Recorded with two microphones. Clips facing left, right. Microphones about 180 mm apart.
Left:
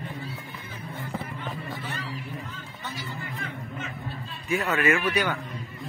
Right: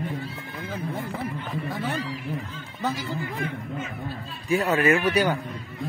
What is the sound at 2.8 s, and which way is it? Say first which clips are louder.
Speech: right 11 dB; 90° right.